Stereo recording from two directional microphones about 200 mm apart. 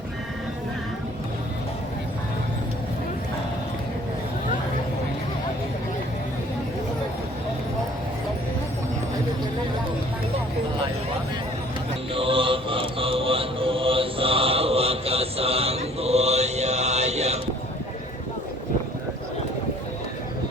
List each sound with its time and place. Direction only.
12.1 s mantra: 25° right (ahead or behind)